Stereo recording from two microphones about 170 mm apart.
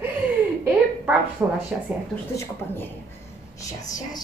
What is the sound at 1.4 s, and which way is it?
Speech, 10° right (ahead or behind).